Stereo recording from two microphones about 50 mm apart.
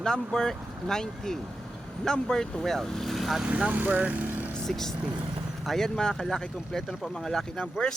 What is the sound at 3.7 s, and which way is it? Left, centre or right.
Speech, right.